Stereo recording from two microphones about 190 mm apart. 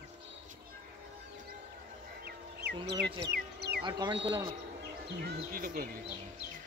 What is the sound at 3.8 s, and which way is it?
Speech, 25° right (ahead or behind).